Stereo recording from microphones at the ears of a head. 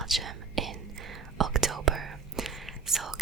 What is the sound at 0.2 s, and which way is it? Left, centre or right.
Whispering, right.